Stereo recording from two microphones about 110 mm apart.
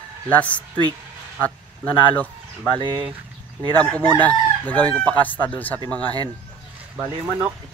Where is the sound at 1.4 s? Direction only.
15° left (ahead or behind).